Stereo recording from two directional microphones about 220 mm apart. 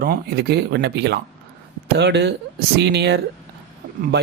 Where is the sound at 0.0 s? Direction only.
45° right (ahead or behind).